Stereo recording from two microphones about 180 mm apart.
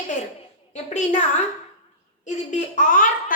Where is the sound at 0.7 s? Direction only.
40° left (ahead or behind).